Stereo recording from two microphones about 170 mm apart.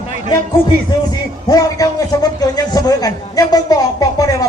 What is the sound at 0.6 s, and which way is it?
Music, 70° right (ahead or behind).